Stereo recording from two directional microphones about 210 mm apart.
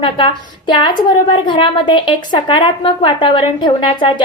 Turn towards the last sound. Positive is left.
turn(degrees=25)  # may be behind; listen again after turning